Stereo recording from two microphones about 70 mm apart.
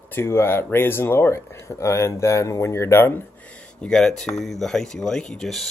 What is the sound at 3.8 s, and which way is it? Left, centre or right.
Speech, centre.